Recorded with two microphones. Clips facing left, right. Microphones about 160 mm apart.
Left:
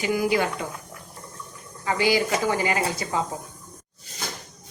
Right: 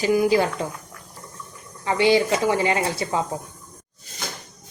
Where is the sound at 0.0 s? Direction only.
30° right (ahead or behind).